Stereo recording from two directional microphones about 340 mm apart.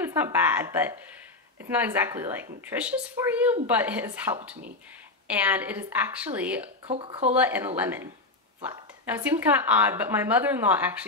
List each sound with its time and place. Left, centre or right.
0.0 s a woman's voice: centre
6.9 s speech: centre
7.3 s a woman's voice: centre